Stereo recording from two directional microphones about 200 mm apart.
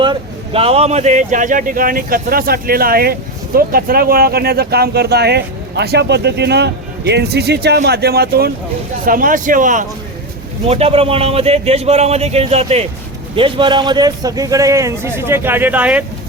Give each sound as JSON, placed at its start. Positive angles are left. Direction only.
{"t": 0.0, "sound": "speech", "side_deg": -25}
{"t": 10.7, "sound": "a man's voice", "side_deg": -30}